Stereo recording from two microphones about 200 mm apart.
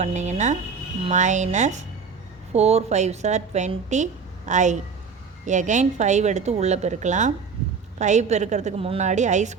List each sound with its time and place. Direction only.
0.0 s a woman's voice: 35° right (ahead or behind)